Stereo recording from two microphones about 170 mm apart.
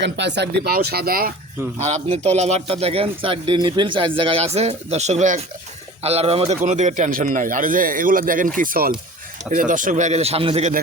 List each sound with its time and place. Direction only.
0.0 s speech: 90° right; by 1.3 s 60° right (ahead or behind)
1.8 s a man's voice: 40° right (ahead or behind)